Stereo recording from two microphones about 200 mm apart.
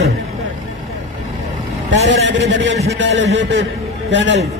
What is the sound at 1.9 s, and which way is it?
A man's voice, 65° right (ahead or behind).